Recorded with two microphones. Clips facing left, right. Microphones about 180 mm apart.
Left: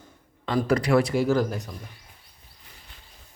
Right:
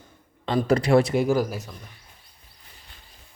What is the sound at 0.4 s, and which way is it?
Speech, 25° right (ahead or behind).